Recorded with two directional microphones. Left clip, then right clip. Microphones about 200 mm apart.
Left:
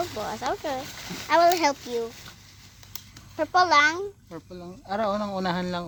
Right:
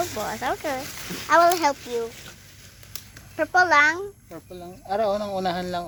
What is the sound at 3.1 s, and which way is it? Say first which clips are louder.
Speech: right 2 dB; 10° left (ahead or behind).